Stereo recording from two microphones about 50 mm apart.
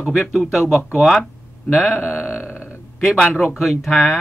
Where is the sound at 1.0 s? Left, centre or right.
Centre.